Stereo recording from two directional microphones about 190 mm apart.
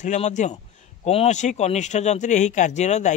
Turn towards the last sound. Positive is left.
turn(degrees=35)  # may be behind; listen again after turning